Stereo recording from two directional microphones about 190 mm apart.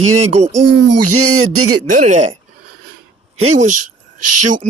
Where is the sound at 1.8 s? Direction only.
45° right (ahead or behind).